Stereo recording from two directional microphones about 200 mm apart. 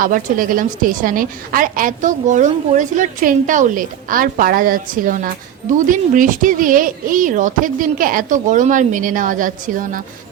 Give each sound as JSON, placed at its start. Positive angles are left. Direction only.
{"t": 0.0, "sound": "a woman's voice", "side_deg": -45}